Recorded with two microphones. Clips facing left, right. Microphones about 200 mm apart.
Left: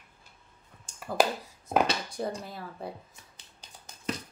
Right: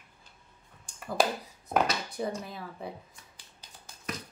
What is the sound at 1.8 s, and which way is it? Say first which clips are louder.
Speech: left 1 dB; 30° left (ahead or behind).